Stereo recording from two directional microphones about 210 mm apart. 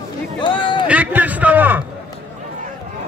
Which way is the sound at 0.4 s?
25° left (ahead or behind).